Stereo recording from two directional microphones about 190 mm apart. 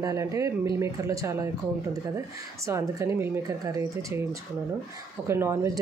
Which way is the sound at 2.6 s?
15° right (ahead or behind).